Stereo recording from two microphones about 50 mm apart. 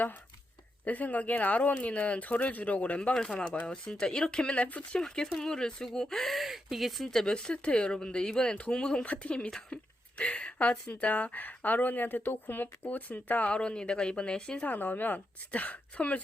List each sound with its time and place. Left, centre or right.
0.9 s speech: left
3.2 s speech: centre
4.9 s speech: centre
6.3 s speech: centre; by 13.6 s left
13.6 s speech: centre
14.6 s speech: left